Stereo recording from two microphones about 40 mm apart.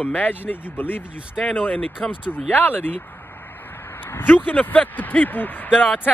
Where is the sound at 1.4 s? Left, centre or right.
Left.